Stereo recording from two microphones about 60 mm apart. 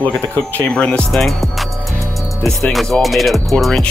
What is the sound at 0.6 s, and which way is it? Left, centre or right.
Speech, centre.